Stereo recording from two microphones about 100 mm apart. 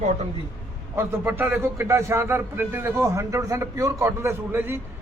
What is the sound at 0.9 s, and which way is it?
A man's voice, 20° right (ahead or behind).